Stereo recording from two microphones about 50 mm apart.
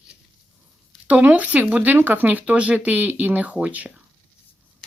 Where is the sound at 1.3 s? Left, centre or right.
Right.